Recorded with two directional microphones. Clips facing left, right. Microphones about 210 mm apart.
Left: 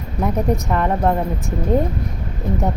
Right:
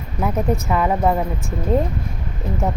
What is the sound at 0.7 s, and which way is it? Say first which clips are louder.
Speech: even; 5° right (ahead or behind).